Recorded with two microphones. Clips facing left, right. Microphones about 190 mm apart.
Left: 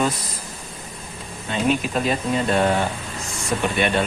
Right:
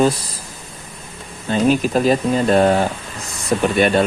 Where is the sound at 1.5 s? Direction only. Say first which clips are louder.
Right 6 dB; 35° right (ahead or behind).